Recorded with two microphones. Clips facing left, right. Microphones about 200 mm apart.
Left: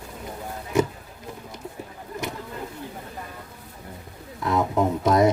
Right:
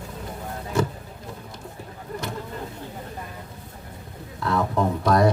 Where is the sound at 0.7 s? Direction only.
20° left (ahead or behind).